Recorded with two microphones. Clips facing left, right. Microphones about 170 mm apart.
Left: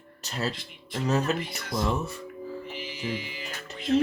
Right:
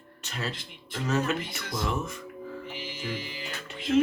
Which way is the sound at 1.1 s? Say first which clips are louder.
Left 1 dB; 35° left (ahead or behind).